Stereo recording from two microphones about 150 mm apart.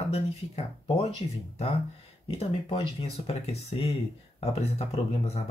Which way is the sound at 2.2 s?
40° left (ahead or behind).